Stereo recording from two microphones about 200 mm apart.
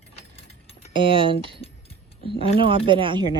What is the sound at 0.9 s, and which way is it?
Speech, 25° right (ahead or behind).